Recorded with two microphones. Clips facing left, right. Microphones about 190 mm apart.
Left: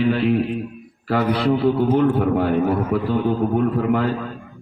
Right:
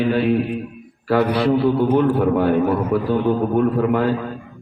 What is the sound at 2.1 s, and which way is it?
A man's voice, 45° right (ahead or behind).